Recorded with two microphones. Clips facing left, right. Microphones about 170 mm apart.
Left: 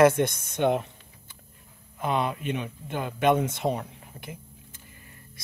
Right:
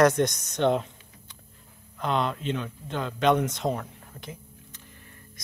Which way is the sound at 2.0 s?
5° left (ahead or behind).